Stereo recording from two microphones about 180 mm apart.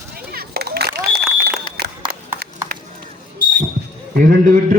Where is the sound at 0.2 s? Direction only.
60° right (ahead or behind).